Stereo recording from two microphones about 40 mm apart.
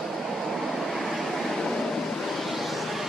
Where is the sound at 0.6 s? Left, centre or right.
Centre.